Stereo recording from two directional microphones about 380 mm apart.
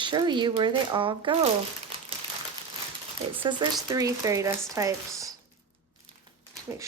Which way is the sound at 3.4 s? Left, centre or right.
Centre.